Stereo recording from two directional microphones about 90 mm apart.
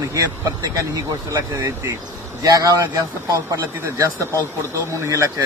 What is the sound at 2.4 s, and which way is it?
Speech, 40° right (ahead or behind).